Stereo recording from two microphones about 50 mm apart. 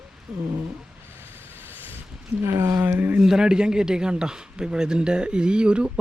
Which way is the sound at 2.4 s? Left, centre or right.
Right.